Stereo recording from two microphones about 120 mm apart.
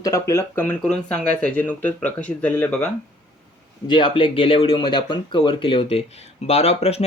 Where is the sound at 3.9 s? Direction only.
45° left (ahead or behind).